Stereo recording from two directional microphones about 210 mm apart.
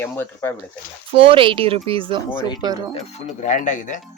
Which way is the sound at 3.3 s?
35° left (ahead or behind).